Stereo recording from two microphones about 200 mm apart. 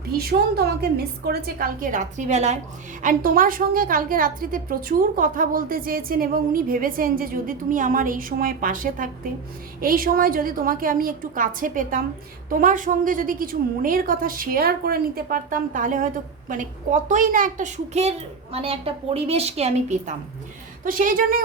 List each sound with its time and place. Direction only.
0.0 s a woman's voice: 50° right (ahead or behind)